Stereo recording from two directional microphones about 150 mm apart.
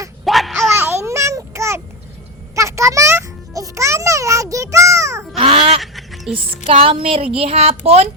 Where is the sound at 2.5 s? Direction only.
20° right (ahead or behind).